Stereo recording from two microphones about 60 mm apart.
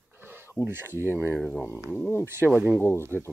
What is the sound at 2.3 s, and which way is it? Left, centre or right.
Speech, right.